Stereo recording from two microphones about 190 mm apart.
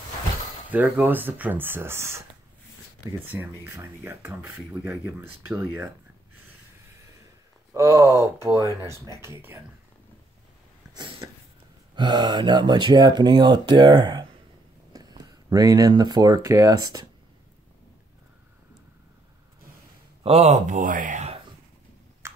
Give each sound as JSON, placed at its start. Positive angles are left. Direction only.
{"t": 0.7, "sound": "speech", "side_deg": -10}
{"t": 3.3, "sound": "speech", "side_deg": -10}
{"t": 7.7, "sound": "speech", "side_deg": -15}
{"t": 11.0, "sound": "a sound", "side_deg": -25}
{"t": 11.9, "sound": "speech", "side_deg": -25}
{"t": 14.9, "sound": "a sound", "side_deg": -20}
{"t": 16.4, "sound": "speech", "side_deg": -15}
{"t": 20.2, "sound": "speech", "side_deg": -35}
{"t": 22.2, "sound": "finger snapping", "side_deg": -15}